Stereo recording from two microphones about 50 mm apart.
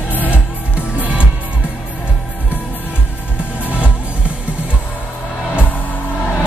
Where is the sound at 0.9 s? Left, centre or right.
Right.